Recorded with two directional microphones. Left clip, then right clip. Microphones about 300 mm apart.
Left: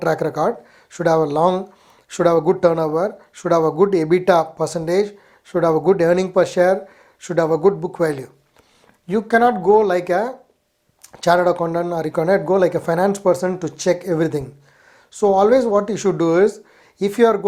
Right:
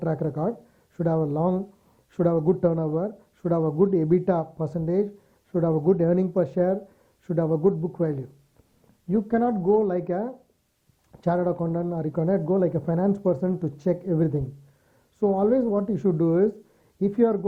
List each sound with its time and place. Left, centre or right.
0.0 s speech: centre
5.7 s speech: centre
6.0 s speech: centre
7.5 s speech: centre
8.0 s speech: centre
15.4 s speech: centre